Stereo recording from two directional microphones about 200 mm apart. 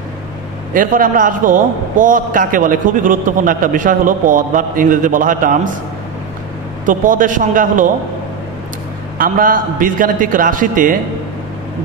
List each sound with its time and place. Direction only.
0.7 s a man's voice: 45° right (ahead or behind)
6.9 s a man's voice: 40° right (ahead or behind)
9.2 s a man's voice: 45° right (ahead or behind)